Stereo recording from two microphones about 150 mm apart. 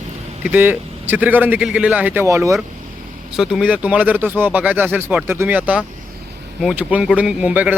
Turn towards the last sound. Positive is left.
turn(degrees=-5)  # may be behind; listen again after turning